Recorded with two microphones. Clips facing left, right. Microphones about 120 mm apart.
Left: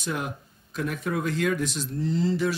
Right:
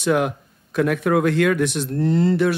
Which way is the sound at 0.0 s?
75° right (ahead or behind).